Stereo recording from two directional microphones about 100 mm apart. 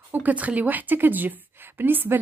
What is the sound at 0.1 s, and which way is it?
A woman's voice, 15° right (ahead or behind).